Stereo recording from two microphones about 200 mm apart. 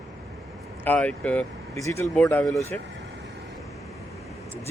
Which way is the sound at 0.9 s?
5° left (ahead or behind).